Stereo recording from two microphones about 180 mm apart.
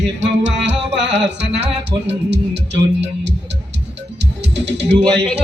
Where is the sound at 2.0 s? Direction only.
75° right (ahead or behind).